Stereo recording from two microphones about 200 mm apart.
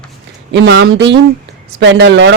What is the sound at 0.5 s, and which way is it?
Speech, 60° right (ahead or behind).